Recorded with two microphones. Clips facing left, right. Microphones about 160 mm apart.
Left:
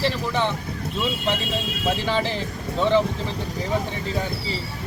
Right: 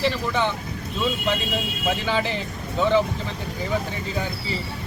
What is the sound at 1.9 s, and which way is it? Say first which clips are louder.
Speech: left 1 dB; centre (ahead or behind).